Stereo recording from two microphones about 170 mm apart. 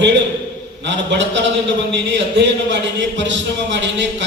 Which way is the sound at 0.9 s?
90° right.